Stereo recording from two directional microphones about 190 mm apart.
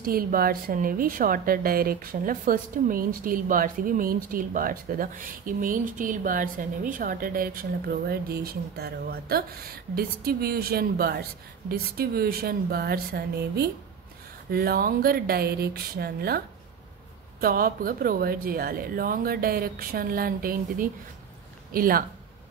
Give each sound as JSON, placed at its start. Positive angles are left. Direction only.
{"t": 0.0, "sound": "a woman's voice", "side_deg": -50}